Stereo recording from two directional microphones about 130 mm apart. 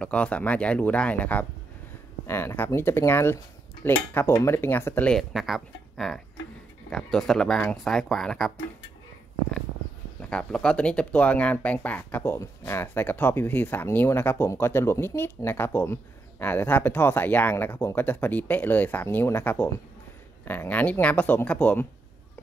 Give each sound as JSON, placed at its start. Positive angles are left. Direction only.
{"t": 0.0, "sound": "speech", "side_deg": 10}
{"t": 5.3, "sound": "speech", "side_deg": 0}
{"t": 10.3, "sound": "speech", "side_deg": 5}